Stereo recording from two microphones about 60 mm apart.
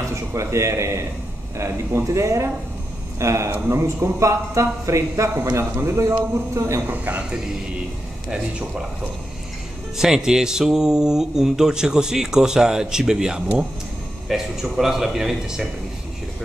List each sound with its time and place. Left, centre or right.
0.1 s a man's voice: right
5.6 s a man's voice: right
6.9 s speech: right
9.9 s speech: centre